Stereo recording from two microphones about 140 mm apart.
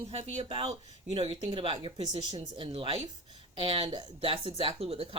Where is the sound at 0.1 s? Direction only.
50° right (ahead or behind).